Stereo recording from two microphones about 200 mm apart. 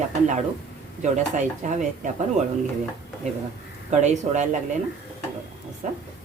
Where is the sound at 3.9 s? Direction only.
35° right (ahead or behind).